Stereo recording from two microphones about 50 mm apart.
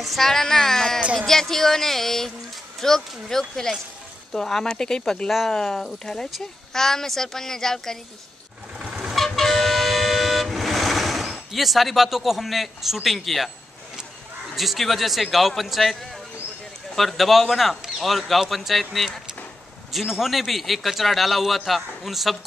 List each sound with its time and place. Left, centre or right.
0.0 s a child's voice: centre
5.3 s a man's voice: centre
9.1 s vehicle: centre
14.5 s a man's voice: centre